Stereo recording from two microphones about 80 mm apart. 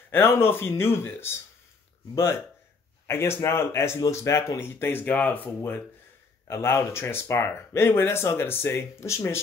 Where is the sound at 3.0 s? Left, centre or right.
Left.